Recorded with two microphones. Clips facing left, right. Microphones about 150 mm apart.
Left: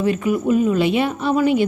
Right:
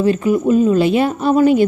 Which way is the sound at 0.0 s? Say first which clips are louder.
Right 4 dB; 30° right (ahead or behind).